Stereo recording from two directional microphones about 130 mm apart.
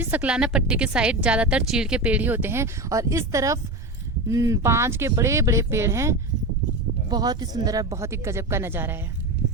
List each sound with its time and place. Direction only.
0.0 s a woman's voice: 10° right (ahead or behind)